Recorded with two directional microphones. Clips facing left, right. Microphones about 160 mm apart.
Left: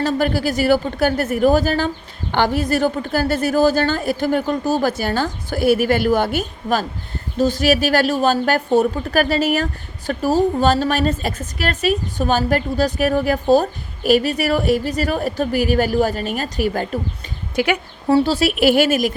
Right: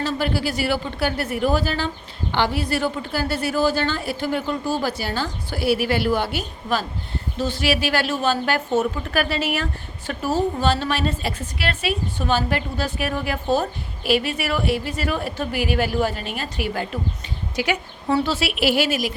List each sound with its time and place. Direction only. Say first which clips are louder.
0.0 s a woman's voice: left 5 dB; 45° left (ahead or behind)
17.6 s speech: left 5 dB; 55° left (ahead or behind)
18.1 s a woman's voice: left 6 dB; 35° left (ahead or behind)